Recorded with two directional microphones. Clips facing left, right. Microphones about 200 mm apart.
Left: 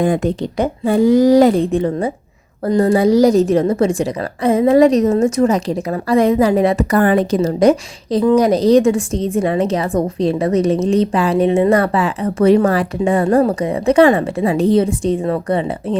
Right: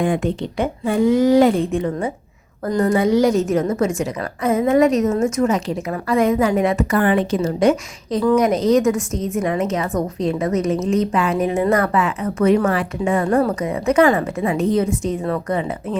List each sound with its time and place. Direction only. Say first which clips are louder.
0.0 s a woman's voice: left 3 dB; 40° left (ahead or behind)